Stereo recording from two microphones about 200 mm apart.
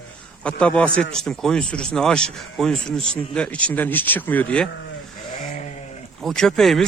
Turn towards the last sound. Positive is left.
turn(degrees=0)  # may be behind; listen again after turning